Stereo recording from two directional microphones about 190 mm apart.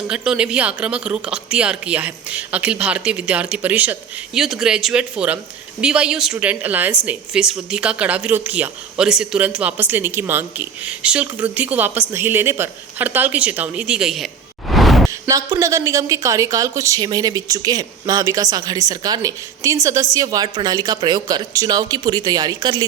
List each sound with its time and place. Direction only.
0.1 s speech: 5° right (ahead or behind)
14.7 s a sound: centre (ahead or behind)
15.3 s a woman's voice: 15° right (ahead or behind)